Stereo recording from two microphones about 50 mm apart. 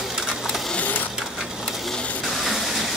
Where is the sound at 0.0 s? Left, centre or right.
Centre.